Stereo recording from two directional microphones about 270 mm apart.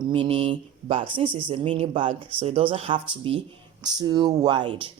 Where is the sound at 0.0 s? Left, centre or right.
Centre.